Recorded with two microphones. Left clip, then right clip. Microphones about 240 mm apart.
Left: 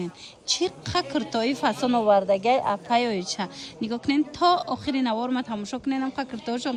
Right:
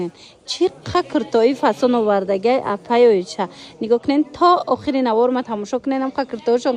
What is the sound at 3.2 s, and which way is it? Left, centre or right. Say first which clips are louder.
Speech: right 7 dB; centre.